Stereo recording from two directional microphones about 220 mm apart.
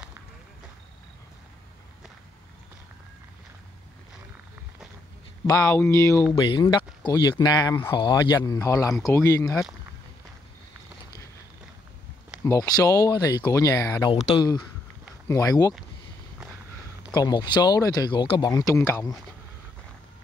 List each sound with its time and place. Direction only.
5.5 s speech: 10° left (ahead or behind)
12.4 s speech: 15° left (ahead or behind)
14.1 s speech: 30° left (ahead or behind)
15.2 s speech: 15° left (ahead or behind)
17.1 s speech: 15° left (ahead or behind)